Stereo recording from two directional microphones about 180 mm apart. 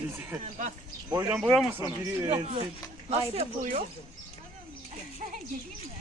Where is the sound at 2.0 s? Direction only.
25° right (ahead or behind).